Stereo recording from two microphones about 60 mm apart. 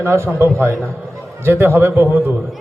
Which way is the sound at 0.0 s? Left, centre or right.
Right.